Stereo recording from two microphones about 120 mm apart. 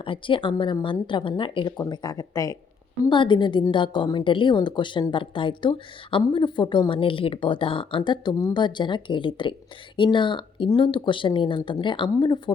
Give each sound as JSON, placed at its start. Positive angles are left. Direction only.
{"t": 0.0, "sound": "a woman's voice", "side_deg": 45}
{"t": 3.1, "sound": "a woman's voice", "side_deg": 40}